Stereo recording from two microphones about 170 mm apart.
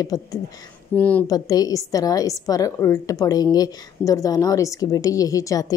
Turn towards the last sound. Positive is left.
turn(degrees=20)  # may be behind; listen again after turning